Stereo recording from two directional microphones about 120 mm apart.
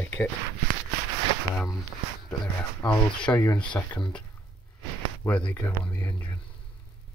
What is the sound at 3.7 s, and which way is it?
Speech, 20° left (ahead or behind).